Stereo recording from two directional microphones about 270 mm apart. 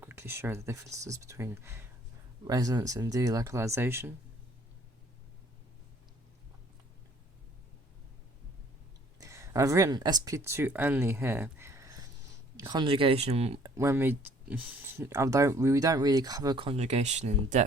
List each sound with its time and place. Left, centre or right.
0.0 s speech: centre
9.1 s speech: centre
13.7 s speech: centre; by 17.6 s right